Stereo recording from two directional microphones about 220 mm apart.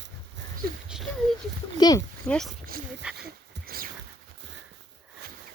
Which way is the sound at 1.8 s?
15° left (ahead or behind).